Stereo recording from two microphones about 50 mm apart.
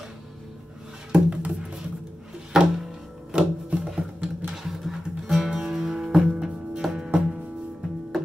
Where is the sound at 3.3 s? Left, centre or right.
Centre.